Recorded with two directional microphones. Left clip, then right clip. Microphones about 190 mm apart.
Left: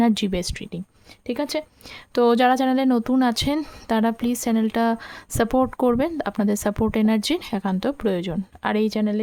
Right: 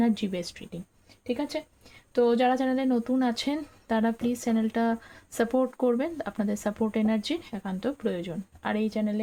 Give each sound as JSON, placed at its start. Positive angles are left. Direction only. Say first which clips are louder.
{"t": 0.0, "sound": "a woman's voice", "louder": "left 7 dB", "side_deg": 45}